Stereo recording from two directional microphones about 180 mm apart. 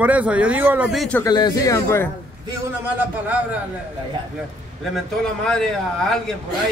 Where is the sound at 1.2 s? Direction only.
20° left (ahead or behind).